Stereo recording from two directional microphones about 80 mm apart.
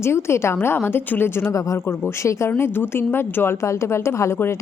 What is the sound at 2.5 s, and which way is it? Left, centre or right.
A woman's voice, left.